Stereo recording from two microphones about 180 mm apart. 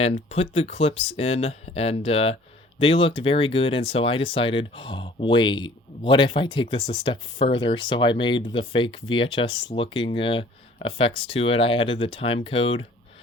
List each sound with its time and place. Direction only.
0.0 s speech: 35° left (ahead or behind)